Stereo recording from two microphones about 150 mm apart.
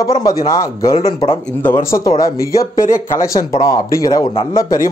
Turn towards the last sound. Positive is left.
turn(degrees=20)  # may be behind; listen again after turning